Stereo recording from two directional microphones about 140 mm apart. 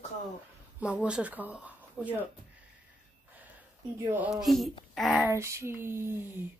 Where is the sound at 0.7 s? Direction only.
10° right (ahead or behind).